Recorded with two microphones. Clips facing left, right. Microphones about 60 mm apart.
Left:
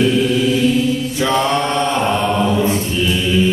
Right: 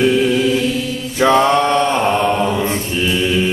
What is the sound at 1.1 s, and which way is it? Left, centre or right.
Mantra, right.